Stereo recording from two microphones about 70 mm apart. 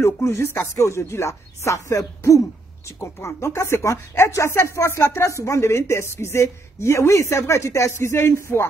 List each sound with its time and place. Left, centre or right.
0.0 s speech: left